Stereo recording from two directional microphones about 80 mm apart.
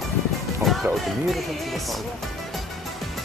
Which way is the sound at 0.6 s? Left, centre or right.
Centre.